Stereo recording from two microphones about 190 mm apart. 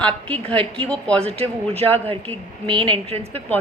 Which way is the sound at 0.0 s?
10° left (ahead or behind).